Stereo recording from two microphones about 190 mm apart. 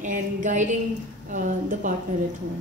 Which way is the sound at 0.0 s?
40° right (ahead or behind).